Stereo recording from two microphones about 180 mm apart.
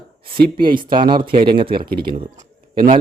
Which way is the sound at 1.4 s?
30° right (ahead or behind).